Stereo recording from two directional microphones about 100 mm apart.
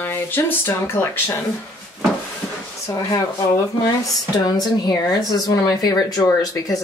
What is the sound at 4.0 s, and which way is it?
Speech, 40° left (ahead or behind).